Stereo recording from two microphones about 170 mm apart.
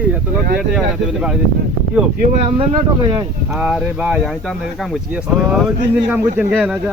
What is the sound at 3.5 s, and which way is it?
Speech, 5° right (ahead or behind).